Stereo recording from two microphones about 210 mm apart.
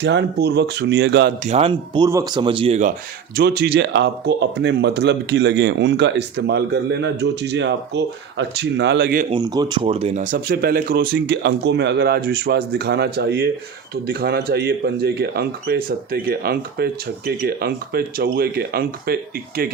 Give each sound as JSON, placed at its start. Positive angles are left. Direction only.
{"t": 0.0, "sound": "speech", "side_deg": -55}
{"t": 1.5, "sound": "speech", "side_deg": -30}
{"t": 3.3, "sound": "speech", "side_deg": -50}
{"t": 9.3, "sound": "speech", "side_deg": -20}